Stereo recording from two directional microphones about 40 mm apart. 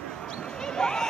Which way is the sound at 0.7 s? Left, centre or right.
Centre.